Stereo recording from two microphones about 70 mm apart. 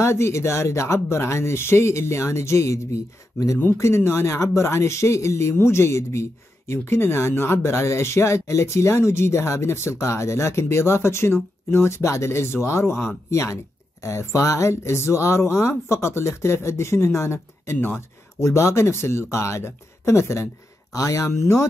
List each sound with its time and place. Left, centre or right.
0.0 s speech: left